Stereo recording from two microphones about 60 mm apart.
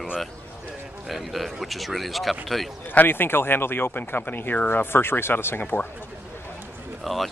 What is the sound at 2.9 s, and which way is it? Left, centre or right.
Speech, left.